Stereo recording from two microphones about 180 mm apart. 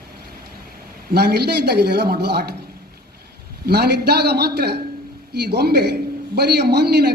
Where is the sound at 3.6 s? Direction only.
65° right (ahead or behind).